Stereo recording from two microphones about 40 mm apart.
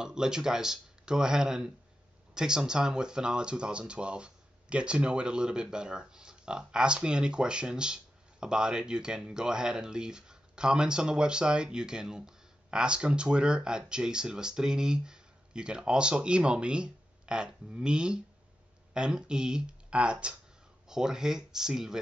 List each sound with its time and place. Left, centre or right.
0.0 s speech: centre
20.9 s speech: centre